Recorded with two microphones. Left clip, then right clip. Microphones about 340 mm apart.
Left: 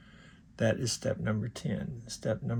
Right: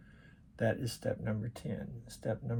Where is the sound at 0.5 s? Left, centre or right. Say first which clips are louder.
Left 4 dB; left.